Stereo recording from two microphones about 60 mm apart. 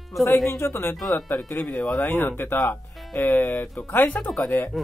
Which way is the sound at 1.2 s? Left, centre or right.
Left.